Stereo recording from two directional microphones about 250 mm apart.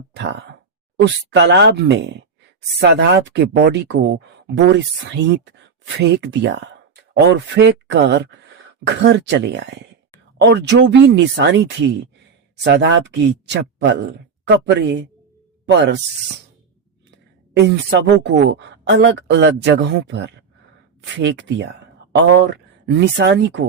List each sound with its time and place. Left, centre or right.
0.1 s a sound: right
1.0 s speech: right
17.5 s speech: right